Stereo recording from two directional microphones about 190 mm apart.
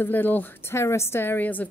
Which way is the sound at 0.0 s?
10° left (ahead or behind).